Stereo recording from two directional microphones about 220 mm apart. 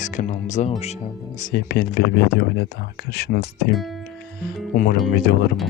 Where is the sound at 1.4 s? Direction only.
45° left (ahead or behind).